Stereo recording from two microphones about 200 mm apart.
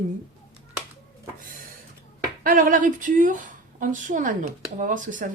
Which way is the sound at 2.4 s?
40° right (ahead or behind).